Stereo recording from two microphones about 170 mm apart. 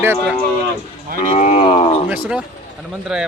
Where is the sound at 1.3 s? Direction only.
40° left (ahead or behind).